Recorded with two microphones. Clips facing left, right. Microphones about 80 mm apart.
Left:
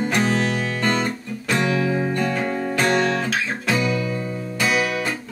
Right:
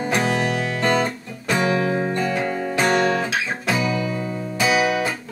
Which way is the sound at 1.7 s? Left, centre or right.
Right.